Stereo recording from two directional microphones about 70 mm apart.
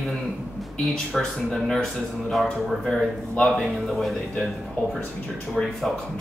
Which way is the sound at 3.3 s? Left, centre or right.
Centre.